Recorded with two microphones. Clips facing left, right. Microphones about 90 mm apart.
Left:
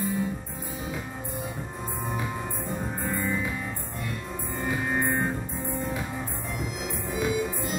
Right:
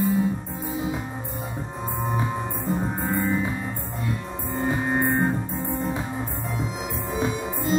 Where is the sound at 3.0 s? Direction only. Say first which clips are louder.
Right 4 dB; 30° right (ahead or behind).